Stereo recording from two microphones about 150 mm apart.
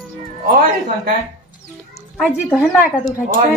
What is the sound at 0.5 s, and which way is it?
Speech, 65° right (ahead or behind).